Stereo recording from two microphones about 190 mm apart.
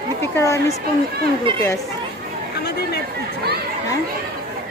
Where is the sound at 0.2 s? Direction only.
15° left (ahead or behind).